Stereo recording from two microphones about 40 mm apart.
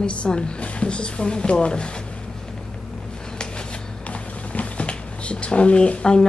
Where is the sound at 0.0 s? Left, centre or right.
Left.